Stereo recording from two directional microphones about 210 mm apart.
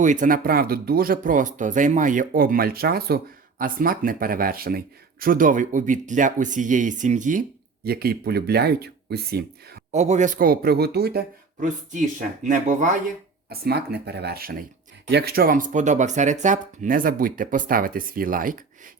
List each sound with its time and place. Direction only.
0.0 s speech: 35° right (ahead or behind)
9.9 s speech: 30° right (ahead or behind); by 11.2 s 50° right (ahead or behind)
11.6 s speech: 35° right (ahead or behind)
13.5 s speech: 50° right (ahead or behind)